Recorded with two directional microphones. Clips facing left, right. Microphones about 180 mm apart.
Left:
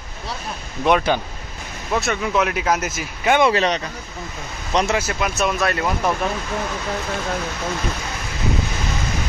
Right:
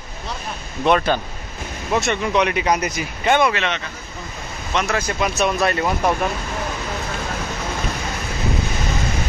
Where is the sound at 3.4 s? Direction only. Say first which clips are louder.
Left 3 dB; 35° left (ahead or behind).